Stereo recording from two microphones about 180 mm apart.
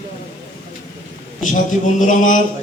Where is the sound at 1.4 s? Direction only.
45° left (ahead or behind).